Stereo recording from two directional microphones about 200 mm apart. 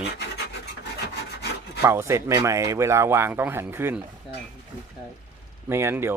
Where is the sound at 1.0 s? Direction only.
55° left (ahead or behind).